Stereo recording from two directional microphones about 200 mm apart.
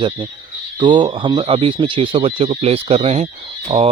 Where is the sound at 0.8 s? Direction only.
25° right (ahead or behind).